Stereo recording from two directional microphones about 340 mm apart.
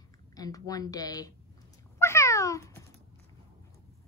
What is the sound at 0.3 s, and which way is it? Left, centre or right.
A woman's voice, centre.